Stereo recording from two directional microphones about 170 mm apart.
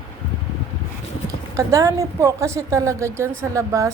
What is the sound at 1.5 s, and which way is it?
A woman's voice, 20° right (ahead or behind).